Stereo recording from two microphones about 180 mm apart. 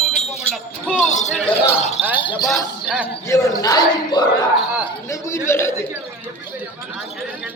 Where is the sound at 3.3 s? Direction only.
15° left (ahead or behind).